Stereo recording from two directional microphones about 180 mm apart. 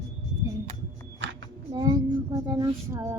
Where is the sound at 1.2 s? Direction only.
85° right.